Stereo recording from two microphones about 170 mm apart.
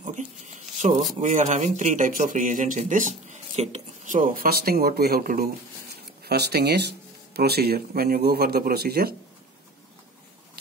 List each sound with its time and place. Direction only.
0.0 s speech: 45° right (ahead or behind); by 5.5 s 60° right (ahead or behind)
6.2 s speech: 75° right (ahead or behind)